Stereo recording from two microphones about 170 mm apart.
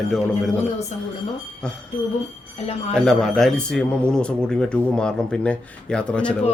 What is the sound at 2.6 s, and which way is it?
Speech, 40° left (ahead or behind).